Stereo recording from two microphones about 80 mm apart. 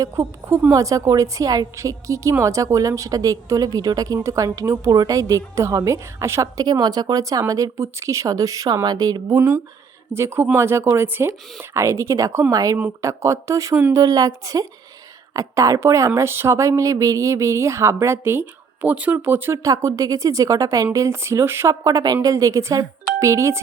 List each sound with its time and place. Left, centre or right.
0.2 s speech: right
0.7 s speech: right
6.6 s speech: right
10.1 s speech: right
19.6 s speech: right
21.8 s speech: right